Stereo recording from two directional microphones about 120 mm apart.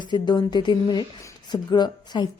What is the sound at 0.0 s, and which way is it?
Speech, 35° left (ahead or behind).